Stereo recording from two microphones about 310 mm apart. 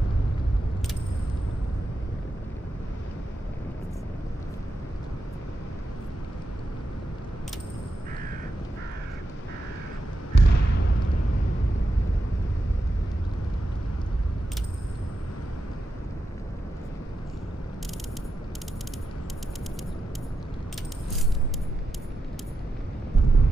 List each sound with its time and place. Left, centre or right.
10.3 s basketball bounce: left